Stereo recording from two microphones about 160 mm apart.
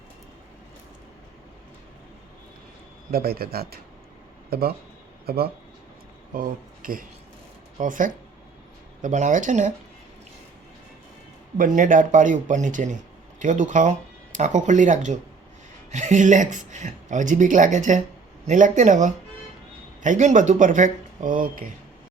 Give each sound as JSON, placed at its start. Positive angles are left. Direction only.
{"t": 3.1, "sound": "a man's voice", "side_deg": -70}
{"t": 6.3, "sound": "speech", "side_deg": -60}
{"t": 11.5, "sound": "speech", "side_deg": -55}